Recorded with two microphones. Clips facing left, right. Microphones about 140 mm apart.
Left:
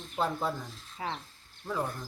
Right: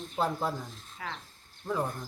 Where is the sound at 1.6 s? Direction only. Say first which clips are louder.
Right 2 dB; 15° right (ahead or behind).